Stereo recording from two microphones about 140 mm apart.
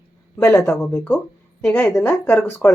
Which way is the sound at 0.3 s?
20° left (ahead or behind).